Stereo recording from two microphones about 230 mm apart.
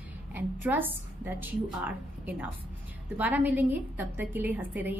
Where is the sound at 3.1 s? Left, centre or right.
Centre.